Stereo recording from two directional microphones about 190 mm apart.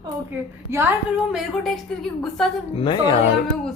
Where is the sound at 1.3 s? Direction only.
Centre (ahead or behind).